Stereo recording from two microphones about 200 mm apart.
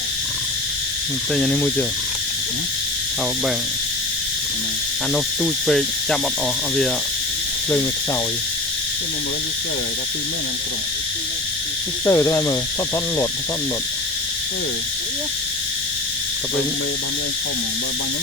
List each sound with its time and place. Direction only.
1.3 s cricket: 5° left (ahead or behind)
5.1 s cricket: 5° left (ahead or behind)
12.0 s speech: 15° left (ahead or behind)